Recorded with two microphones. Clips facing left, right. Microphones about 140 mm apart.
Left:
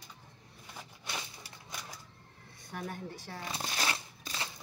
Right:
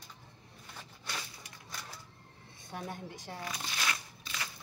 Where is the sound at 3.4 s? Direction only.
30° left (ahead or behind).